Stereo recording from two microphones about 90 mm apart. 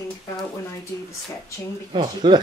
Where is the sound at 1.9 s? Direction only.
60° right (ahead or behind).